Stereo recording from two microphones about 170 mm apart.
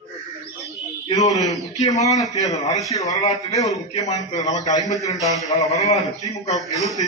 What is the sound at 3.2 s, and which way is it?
Speech, 45° left (ahead or behind).